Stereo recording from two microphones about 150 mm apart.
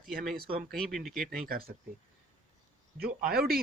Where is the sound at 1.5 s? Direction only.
85° right.